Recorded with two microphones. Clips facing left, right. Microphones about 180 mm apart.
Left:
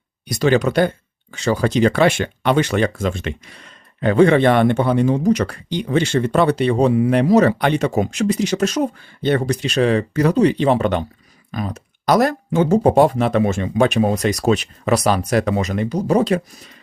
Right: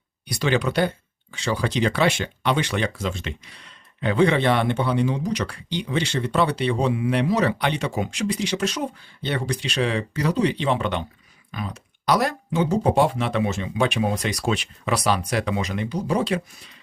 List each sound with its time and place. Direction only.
0.3 s speech: 45° left (ahead or behind)